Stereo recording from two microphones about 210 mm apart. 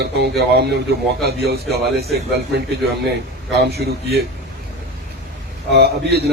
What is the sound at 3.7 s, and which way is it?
Speech, 50° right (ahead or behind).